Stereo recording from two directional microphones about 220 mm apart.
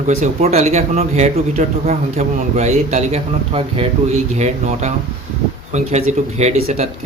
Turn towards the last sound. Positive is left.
turn(degrees=-30)  # may be behind; listen again after turning